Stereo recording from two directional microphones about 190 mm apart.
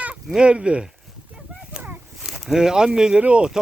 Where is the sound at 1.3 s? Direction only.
10° right (ahead or behind).